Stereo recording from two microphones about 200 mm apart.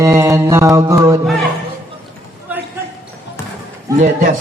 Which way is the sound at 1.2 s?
Centre (ahead or behind).